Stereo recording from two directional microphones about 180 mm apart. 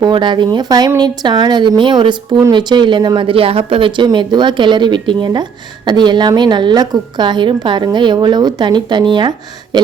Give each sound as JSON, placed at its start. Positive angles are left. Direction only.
{"t": 0.0, "sound": "speech", "side_deg": -25}